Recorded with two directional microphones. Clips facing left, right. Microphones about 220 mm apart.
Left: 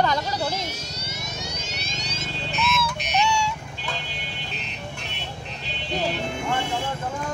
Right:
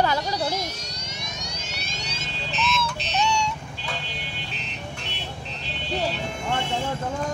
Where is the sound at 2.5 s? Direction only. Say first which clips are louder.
Left 1 dB; 10° left (ahead or behind).